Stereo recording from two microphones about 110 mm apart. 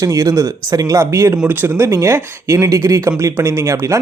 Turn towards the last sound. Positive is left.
turn(degrees=-30)  # may be behind; listen again after turning